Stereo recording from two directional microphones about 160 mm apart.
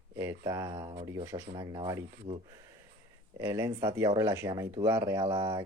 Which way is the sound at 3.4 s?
15° right (ahead or behind).